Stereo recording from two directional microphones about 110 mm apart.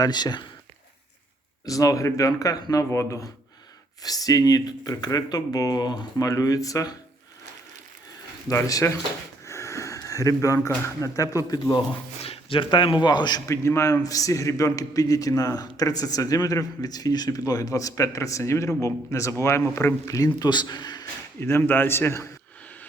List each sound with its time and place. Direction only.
0.0 s a man's voice: 40° left (ahead or behind)
1.6 s a man's voice: 30° left (ahead or behind)
8.4 s a man's voice: 30° left (ahead or behind)
12.2 s speech: 60° left (ahead or behind); by 13.4 s 40° left (ahead or behind)
13.5 s a man's voice: 25° left (ahead or behind)
21.4 s a man's voice: 20° left (ahead or behind)